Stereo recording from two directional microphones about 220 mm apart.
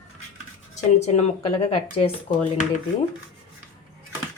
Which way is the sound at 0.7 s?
30° left (ahead or behind).